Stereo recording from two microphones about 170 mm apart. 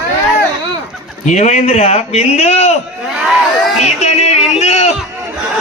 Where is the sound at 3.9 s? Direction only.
40° left (ahead or behind).